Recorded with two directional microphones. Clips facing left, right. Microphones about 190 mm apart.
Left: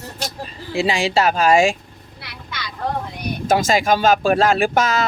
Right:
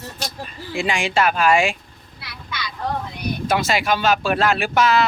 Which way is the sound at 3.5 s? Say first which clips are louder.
Left 4 dB; 45° left (ahead or behind).